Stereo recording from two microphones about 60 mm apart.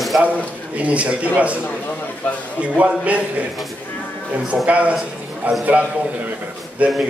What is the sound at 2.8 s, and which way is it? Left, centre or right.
Speech, right.